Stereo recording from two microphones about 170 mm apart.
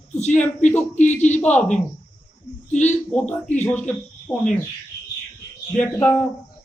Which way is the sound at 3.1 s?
5° left (ahead or behind).